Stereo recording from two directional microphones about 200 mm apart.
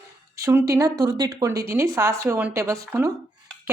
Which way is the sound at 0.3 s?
15° right (ahead or behind).